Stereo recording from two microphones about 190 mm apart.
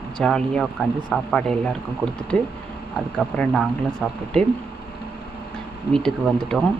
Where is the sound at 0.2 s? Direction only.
5° left (ahead or behind).